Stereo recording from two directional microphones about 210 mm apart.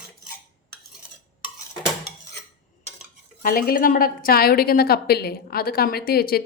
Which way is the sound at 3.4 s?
45° left (ahead or behind).